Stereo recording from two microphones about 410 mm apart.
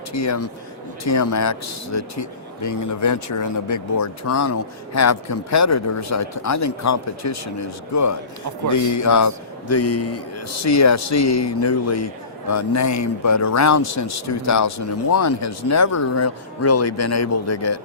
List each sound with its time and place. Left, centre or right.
0.1 s speech: left